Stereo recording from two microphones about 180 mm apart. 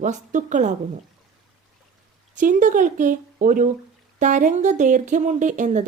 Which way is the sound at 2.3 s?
45° right (ahead or behind).